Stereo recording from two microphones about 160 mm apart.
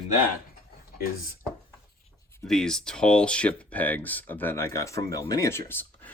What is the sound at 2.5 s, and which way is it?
Speech, 5° left (ahead or behind).